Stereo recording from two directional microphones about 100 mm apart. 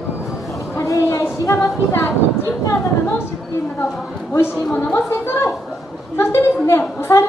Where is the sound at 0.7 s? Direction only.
30° left (ahead or behind).